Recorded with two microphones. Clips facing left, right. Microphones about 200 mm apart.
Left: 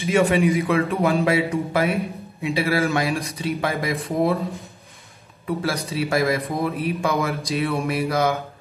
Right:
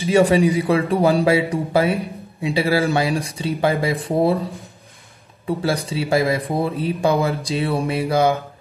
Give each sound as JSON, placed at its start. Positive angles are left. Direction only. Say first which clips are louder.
{"t": 0.0, "sound": "speech", "louder": "right 3 dB", "side_deg": -35}
{"t": 5.6, "sound": "speech", "louder": "right 2 dB", "side_deg": -30}